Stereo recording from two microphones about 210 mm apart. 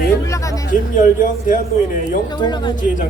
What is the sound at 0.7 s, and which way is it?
Speech, 40° left (ahead or behind).